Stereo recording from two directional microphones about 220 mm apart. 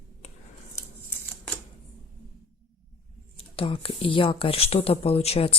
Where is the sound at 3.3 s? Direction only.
25° left (ahead or behind).